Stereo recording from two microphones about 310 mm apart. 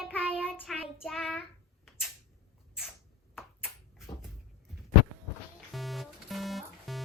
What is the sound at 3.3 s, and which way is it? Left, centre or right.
Finger snapping, centre.